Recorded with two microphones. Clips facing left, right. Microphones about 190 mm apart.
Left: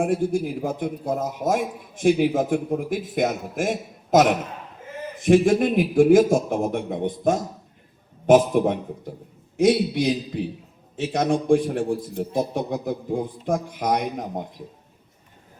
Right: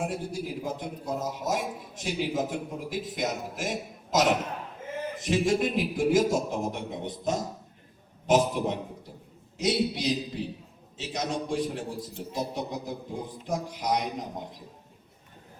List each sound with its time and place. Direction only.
0.0 s a man's voice: 50° left (ahead or behind)